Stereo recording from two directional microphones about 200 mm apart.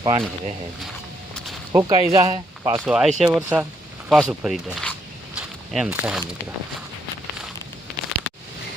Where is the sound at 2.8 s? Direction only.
5° right (ahead or behind).